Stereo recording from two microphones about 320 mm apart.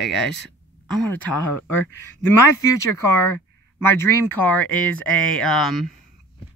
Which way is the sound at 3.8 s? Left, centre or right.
Centre.